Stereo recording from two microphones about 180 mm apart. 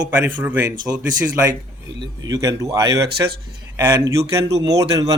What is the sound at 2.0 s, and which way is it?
A man's voice, 20° right (ahead or behind).